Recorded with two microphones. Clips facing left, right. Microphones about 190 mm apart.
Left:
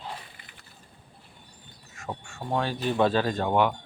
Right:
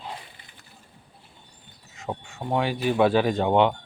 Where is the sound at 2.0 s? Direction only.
20° right (ahead or behind).